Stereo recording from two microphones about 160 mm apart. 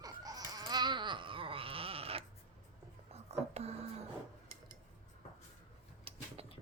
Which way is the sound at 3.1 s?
40° right (ahead or behind).